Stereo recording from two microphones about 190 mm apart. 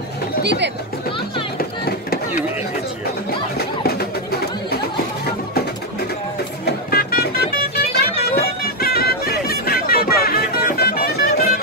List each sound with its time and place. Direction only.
0.4 s speech: 65° right (ahead or behind)
3.3 s music: 55° left (ahead or behind)
6.6 s music: 55° left (ahead or behind)